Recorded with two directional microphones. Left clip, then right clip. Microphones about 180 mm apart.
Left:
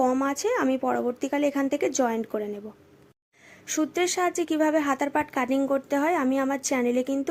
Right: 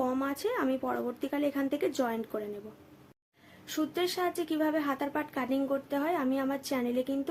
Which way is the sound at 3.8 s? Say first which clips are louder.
Left 6 dB; 35° left (ahead or behind).